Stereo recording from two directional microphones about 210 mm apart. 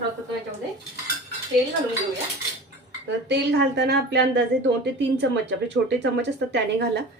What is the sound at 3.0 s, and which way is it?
A woman's voice, 55° right (ahead or behind).